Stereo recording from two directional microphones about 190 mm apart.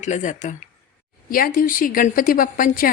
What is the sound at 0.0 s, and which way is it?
A woman's voice, 40° left (ahead or behind).